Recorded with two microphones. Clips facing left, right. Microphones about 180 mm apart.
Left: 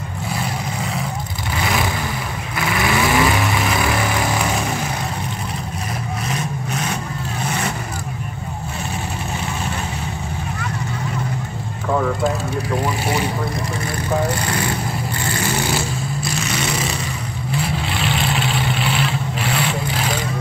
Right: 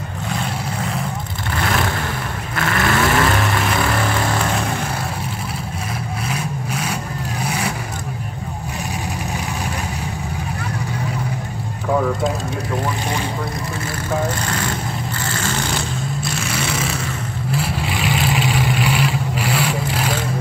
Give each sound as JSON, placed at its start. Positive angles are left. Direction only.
{"t": 1.6, "sound": "vehicle", "side_deg": 10}
{"t": 6.2, "sound": "vehicle", "side_deg": -10}
{"t": 15.2, "sound": "vehicle", "side_deg": 15}
{"t": 16.3, "sound": "vehicle", "side_deg": 0}